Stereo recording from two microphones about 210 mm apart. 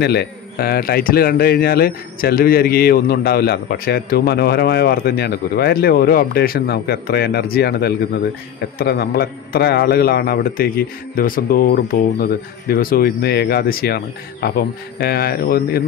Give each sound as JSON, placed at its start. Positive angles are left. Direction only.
{"t": 0.0, "sound": "speech", "side_deg": 50}